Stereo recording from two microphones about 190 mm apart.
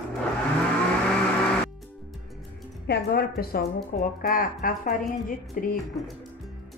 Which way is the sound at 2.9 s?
60° left (ahead or behind).